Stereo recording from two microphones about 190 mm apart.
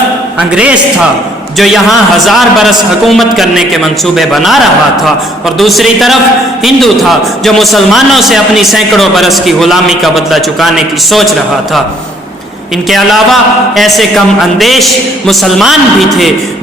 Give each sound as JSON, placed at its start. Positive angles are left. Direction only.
{"t": 0.3, "sound": "a man's voice", "side_deg": -5}
{"t": 12.9, "sound": "a man's voice", "side_deg": 0}